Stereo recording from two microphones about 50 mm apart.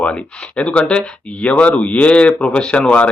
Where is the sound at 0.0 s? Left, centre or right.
Left.